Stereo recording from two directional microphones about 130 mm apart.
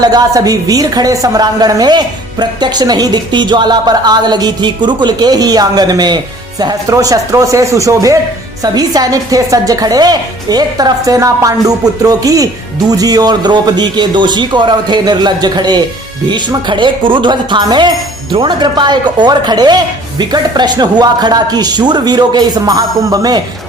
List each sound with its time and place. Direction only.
0.0 s a woman's voice: 30° right (ahead or behind)